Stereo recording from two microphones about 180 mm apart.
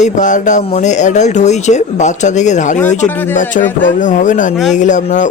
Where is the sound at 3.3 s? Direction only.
45° left (ahead or behind).